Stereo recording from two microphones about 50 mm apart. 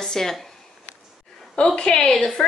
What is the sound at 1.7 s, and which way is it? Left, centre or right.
Speech, centre.